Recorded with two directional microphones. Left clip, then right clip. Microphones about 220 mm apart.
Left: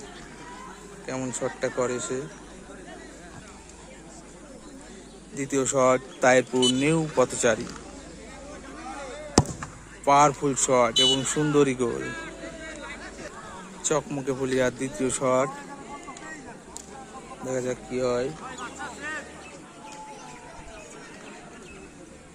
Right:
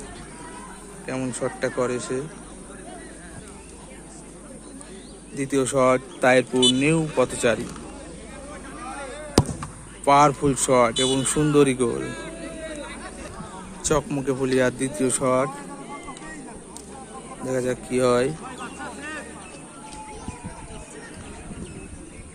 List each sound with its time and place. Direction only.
1.0 s speech: 5° left (ahead or behind)
5.4 s speech: 5° left (ahead or behind)
8.9 s a sound: 50° left (ahead or behind)
10.1 s speech: centre (ahead or behind)
12.0 s speech: 50° right (ahead or behind)
13.8 s speech: centre (ahead or behind)
17.4 s speech: centre (ahead or behind)
18.0 s speech: 10° right (ahead or behind)
18.6 s vehicle: 50° right (ahead or behind)